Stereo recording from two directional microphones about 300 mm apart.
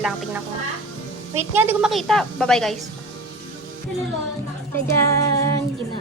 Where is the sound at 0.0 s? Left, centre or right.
Centre.